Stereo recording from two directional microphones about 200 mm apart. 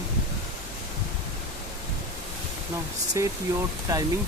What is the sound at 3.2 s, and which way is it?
Speech, 15° right (ahead or behind).